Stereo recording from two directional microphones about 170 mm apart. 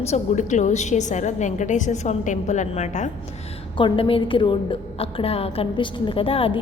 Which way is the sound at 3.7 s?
30° left (ahead or behind).